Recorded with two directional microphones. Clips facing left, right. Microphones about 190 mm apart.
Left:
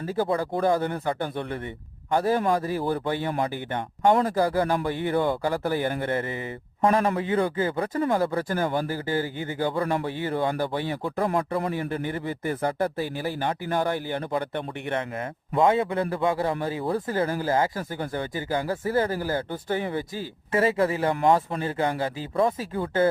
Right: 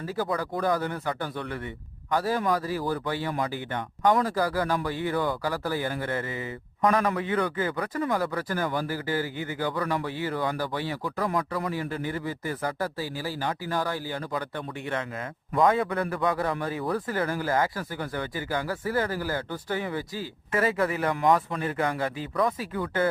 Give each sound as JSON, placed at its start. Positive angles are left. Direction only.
{"t": 0.2, "sound": "speech", "side_deg": 25}